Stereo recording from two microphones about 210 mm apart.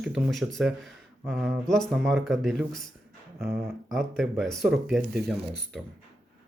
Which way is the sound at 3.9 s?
Centre (ahead or behind).